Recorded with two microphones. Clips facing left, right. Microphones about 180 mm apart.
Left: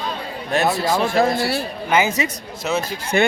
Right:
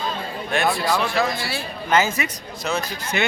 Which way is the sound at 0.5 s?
40° left (ahead or behind).